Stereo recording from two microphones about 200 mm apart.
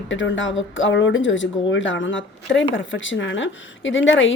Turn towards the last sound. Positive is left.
turn(degrees=70)  # may be behind; listen again after turning